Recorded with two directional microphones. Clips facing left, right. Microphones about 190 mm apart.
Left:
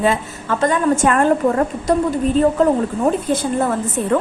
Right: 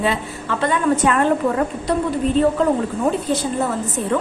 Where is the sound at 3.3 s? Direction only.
50° left (ahead or behind).